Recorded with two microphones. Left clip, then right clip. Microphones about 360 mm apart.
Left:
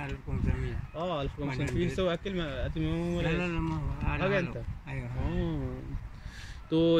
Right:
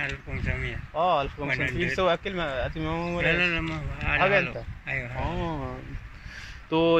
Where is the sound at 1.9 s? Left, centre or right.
Centre.